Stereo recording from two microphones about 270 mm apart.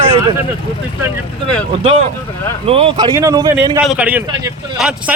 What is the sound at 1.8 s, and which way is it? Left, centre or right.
A man's voice, right.